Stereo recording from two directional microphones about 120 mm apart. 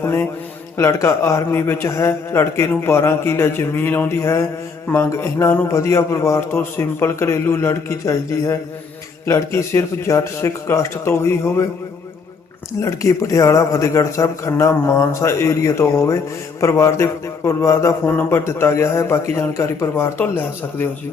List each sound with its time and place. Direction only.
0.0 s a man's voice: 20° left (ahead or behind)
12.8 s speech: 25° left (ahead or behind)